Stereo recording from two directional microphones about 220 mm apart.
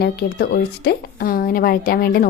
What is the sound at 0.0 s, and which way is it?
A woman's voice, 45° left (ahead or behind).